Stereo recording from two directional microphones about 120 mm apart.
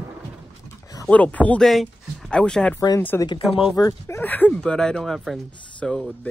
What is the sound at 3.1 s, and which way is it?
Speech, 20° left (ahead or behind).